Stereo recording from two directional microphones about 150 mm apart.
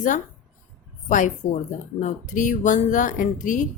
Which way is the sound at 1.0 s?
60° left (ahead or behind).